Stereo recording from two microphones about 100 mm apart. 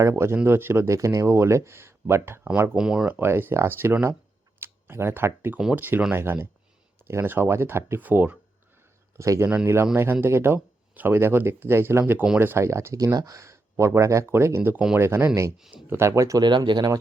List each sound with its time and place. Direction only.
0.0 s speech: 30° right (ahead or behind)
2.7 s speech: 5° right (ahead or behind)
3.1 s speech: 20° right (ahead or behind)
9.1 s a man's voice: 30° right (ahead or behind)
16.4 s speech: 50° right (ahead or behind)